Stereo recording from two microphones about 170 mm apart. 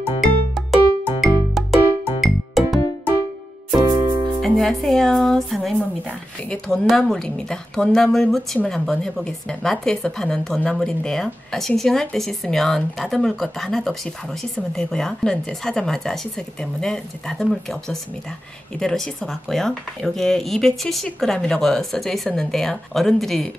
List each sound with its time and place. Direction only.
0.2 s music: centre (ahead or behind)
3.8 s music: 25° right (ahead or behind)
4.4 s a woman's voice: centre (ahead or behind)